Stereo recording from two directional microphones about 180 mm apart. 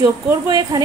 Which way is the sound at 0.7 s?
20° right (ahead or behind).